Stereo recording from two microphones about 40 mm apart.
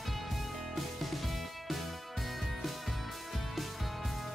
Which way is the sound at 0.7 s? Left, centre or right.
Centre.